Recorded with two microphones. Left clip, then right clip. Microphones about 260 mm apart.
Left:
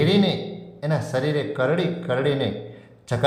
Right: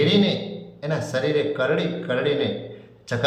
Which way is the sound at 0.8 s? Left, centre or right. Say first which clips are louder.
Even; left.